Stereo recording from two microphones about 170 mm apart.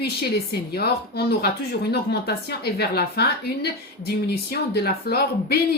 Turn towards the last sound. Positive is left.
turn(degrees=65)  # may be behind; listen again after turning